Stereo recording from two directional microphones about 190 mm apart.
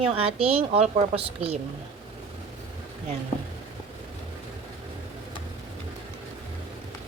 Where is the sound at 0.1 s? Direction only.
30° right (ahead or behind).